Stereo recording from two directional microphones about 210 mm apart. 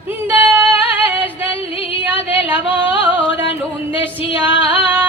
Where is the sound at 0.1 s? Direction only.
10° right (ahead or behind).